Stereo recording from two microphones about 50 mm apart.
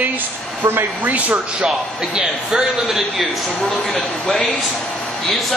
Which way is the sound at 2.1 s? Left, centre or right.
Centre.